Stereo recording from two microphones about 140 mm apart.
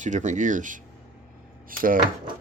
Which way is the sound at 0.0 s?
60° right (ahead or behind).